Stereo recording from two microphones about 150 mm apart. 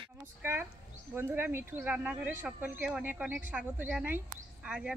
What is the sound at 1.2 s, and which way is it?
Speech, 15° right (ahead or behind).